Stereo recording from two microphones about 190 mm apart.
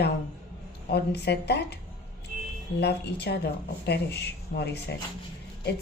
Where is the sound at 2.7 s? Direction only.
60° left (ahead or behind).